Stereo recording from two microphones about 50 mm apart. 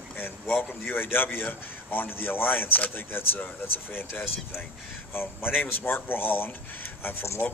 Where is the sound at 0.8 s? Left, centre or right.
Left.